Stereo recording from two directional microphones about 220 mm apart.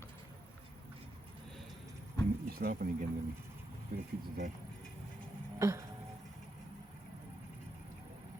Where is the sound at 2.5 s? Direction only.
45° right (ahead or behind).